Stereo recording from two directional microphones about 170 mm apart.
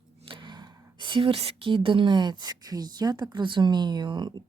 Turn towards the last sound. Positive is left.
turn(degrees=-25)  # may be behind; listen again after turning